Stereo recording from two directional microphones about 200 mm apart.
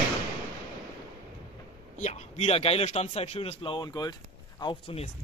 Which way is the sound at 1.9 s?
35° left (ahead or behind).